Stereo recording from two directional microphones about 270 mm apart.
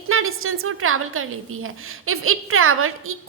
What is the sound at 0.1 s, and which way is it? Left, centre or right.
A woman's voice, right.